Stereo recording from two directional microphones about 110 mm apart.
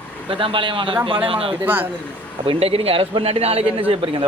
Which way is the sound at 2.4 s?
65° right (ahead or behind).